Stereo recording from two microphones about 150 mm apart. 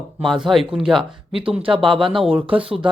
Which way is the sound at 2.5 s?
35° right (ahead or behind).